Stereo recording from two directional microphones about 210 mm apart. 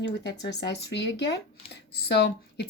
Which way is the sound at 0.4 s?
55° left (ahead or behind).